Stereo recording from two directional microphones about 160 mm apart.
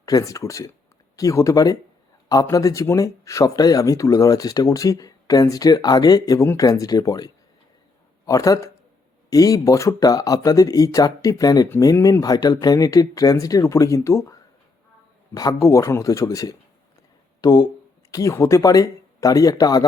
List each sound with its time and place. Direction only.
0.0 s speech: 20° left (ahead or behind)
8.3 s speech: 20° left (ahead or behind)
15.4 s speech: 20° left (ahead or behind)